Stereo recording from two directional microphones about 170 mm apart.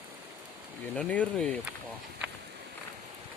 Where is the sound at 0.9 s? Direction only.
5° left (ahead or behind).